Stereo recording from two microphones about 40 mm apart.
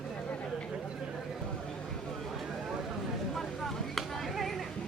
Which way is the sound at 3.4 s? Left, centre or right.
Centre.